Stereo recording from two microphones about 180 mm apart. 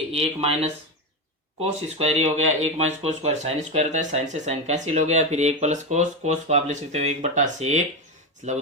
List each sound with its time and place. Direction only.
0.1 s speech: 35° right (ahead or behind)